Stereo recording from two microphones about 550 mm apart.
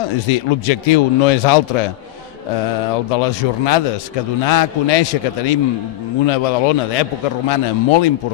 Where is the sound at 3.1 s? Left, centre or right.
Left.